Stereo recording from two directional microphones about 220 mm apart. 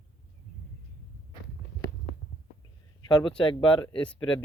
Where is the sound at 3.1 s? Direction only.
20° left (ahead or behind).